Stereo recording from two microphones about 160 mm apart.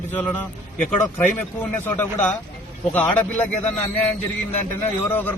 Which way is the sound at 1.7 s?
10° left (ahead or behind).